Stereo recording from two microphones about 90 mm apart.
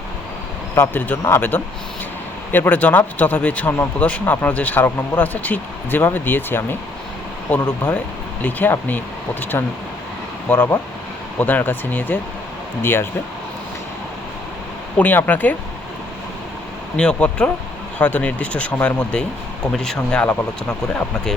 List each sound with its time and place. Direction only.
0.8 s speech: 20° left (ahead or behind)
8.4 s speech: 20° left (ahead or behind)
14.9 s speech: 20° left (ahead or behind)
17.0 s speech: 10° left (ahead or behind)